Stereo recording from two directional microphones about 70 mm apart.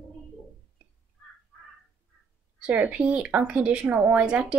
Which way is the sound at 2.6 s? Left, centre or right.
Centre.